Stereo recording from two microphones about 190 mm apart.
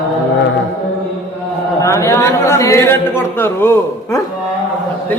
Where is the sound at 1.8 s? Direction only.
15° left (ahead or behind).